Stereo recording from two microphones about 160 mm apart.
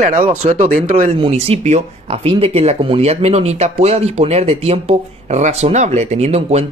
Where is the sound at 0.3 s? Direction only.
45° right (ahead or behind).